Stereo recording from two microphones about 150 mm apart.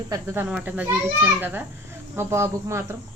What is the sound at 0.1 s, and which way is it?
A child's voice, 20° right (ahead or behind).